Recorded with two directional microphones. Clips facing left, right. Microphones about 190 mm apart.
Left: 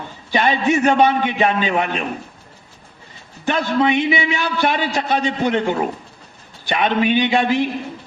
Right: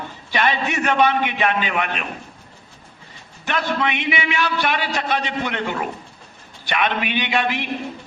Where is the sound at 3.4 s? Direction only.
30° left (ahead or behind).